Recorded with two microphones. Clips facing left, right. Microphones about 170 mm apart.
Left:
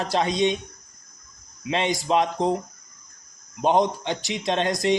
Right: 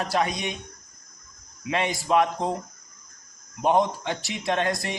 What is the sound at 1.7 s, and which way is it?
Speech, 25° left (ahead or behind).